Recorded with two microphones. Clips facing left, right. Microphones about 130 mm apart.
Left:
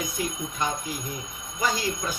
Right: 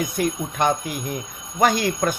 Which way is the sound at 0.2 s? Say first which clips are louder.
Right 8 dB; 70° right (ahead or behind).